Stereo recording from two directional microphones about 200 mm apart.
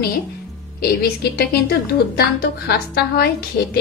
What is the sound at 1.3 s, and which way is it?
A woman's voice, 50° left (ahead or behind).